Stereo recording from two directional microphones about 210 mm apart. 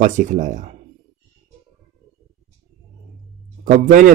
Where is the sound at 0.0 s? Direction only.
35° right (ahead or behind).